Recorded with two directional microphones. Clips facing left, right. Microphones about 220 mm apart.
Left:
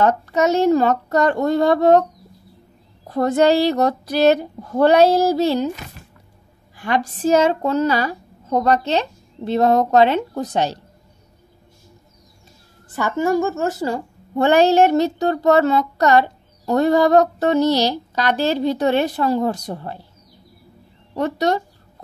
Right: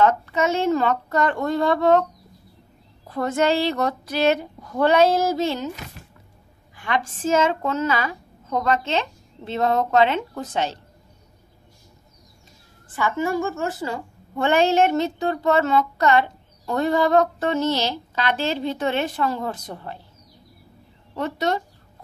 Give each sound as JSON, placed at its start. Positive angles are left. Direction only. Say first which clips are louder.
{"t": 0.0, "sound": "a woman's voice", "louder": "left 3 dB", "side_deg": 40}
{"t": 3.1, "sound": "a woman's voice", "louder": "left 6 dB", "side_deg": 40}
{"t": 6.8, "sound": "a woman's voice", "louder": "left 5 dB", "side_deg": 35}
{"t": 12.9, "sound": "a woman's voice", "louder": "left 4 dB", "side_deg": 40}
{"t": 21.1, "sound": "a woman's voice", "louder": "left 4 dB", "side_deg": 40}